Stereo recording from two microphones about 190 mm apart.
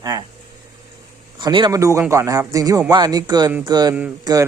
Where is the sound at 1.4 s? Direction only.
25° right (ahead or behind).